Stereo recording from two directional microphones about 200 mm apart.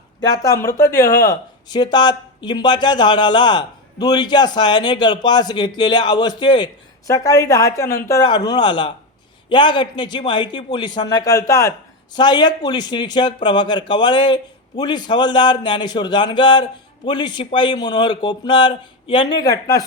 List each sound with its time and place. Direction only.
0.2 s a woman's voice: 20° left (ahead or behind)